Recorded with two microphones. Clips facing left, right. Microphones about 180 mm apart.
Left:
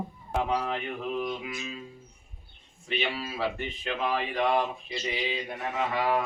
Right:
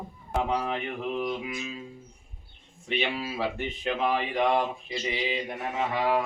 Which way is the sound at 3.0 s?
15° right (ahead or behind).